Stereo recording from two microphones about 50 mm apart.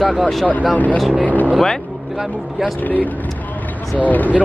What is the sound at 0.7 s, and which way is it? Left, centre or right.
Speech, left.